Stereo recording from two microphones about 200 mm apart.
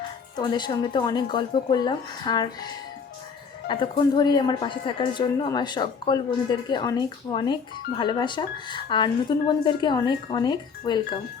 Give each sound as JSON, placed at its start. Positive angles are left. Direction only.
{"t": 0.3, "sound": "a woman's voice", "side_deg": 20}
{"t": 3.7, "sound": "a woman's voice", "side_deg": 25}